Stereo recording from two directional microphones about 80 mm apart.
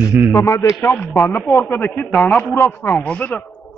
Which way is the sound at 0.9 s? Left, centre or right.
Left.